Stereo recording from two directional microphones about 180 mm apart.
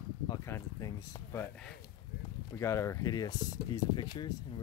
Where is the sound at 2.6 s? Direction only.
15° left (ahead or behind).